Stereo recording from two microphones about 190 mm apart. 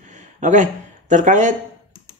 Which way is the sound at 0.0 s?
40° right (ahead or behind).